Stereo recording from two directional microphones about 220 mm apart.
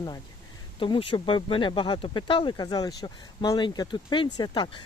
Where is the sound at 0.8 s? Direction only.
20° left (ahead or behind).